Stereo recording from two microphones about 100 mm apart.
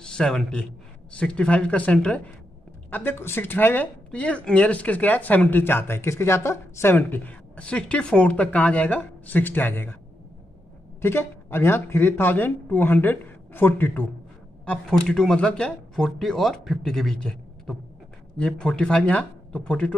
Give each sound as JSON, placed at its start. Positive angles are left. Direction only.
{"t": 0.0, "sound": "a man's voice", "side_deg": 10}
{"t": 11.0, "sound": "speech", "side_deg": 25}
{"t": 14.6, "sound": "speech", "side_deg": 10}